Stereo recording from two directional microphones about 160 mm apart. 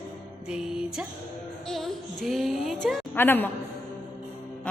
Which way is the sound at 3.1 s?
10° left (ahead or behind).